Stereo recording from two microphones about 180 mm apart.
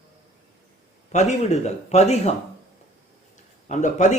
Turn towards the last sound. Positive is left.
turn(degrees=40)  # may be behind; listen again after turning